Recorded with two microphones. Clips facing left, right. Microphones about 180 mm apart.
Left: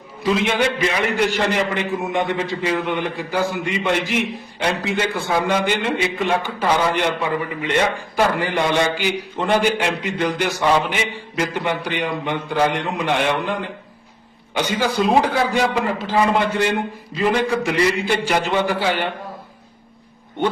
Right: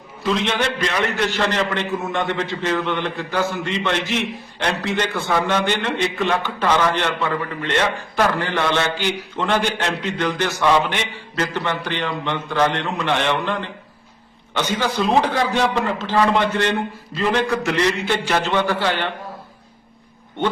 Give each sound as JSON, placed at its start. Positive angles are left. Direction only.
{"t": 0.2, "sound": "a man's voice", "side_deg": 5}